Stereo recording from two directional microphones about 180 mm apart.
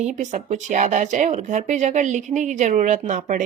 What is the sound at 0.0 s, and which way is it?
A woman's voice, 40° right (ahead or behind).